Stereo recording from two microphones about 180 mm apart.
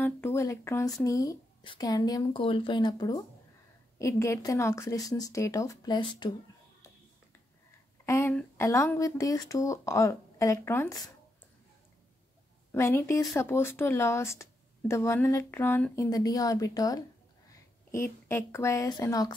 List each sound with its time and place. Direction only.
0.0 s speech: 15° left (ahead or behind)
8.0 s speech: 15° left (ahead or behind)
12.7 s speech: 15° left (ahead or behind)